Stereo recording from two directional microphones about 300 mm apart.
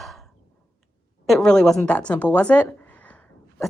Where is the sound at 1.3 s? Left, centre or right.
Centre.